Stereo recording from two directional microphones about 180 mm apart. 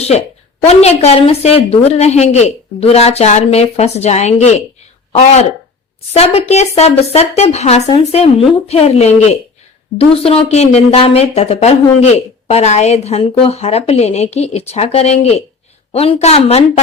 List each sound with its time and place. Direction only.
0.6 s a woman's voice: 35° left (ahead or behind)